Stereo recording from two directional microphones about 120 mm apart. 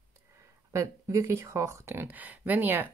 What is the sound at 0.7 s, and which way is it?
Speech, 25° right (ahead or behind).